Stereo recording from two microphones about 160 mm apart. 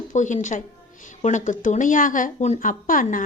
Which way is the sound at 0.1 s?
50° left (ahead or behind).